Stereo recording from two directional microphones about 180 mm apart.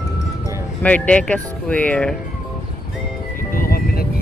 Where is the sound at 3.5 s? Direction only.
55° left (ahead or behind).